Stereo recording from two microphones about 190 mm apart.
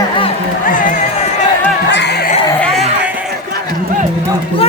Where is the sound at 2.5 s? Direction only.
5° left (ahead or behind).